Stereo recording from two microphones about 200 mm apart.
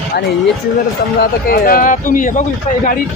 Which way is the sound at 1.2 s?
50° left (ahead or behind).